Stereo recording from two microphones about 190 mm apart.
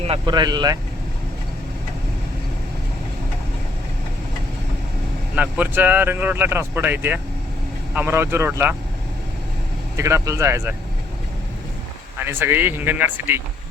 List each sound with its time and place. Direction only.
0.0 s speech: 25° right (ahead or behind)
5.3 s speech: 5° right (ahead or behind)
10.0 s speech: 15° right (ahead or behind)
12.2 s speech: 10° right (ahead or behind)